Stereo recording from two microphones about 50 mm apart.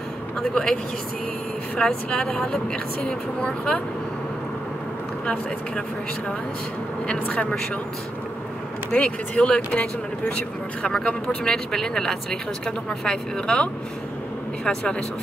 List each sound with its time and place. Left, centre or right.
0.4 s speech: centre
1.8 s speech: centre
5.2 s speech: centre
8.9 s speech: left